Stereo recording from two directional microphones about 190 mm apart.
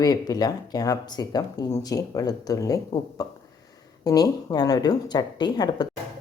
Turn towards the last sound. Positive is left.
turn(degrees=25)  # may be behind; listen again after turning